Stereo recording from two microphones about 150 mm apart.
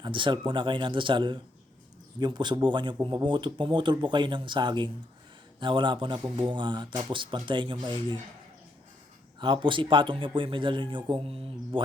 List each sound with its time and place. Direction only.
0.0 s speech: 35° right (ahead or behind)
9.4 s speech: 30° right (ahead or behind)